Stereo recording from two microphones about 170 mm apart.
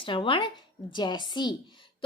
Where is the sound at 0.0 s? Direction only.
30° left (ahead or behind).